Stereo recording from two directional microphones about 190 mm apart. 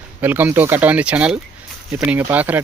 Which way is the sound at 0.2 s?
10° right (ahead or behind).